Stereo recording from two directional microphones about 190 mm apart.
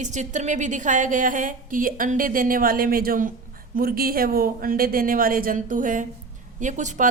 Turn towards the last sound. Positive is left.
turn(degrees=-40)  # may be behind; listen again after turning